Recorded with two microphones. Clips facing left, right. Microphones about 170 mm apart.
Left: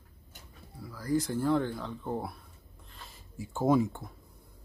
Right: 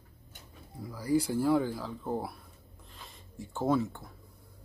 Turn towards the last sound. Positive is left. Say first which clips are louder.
# left 3 dB
turn(degrees=15)  # may be behind; listen again after turning